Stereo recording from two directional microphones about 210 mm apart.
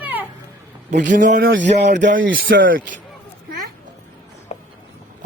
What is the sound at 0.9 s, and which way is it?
Speech, 35° right (ahead or behind).